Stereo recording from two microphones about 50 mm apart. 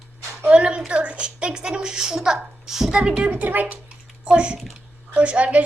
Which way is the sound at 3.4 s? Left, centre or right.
Right.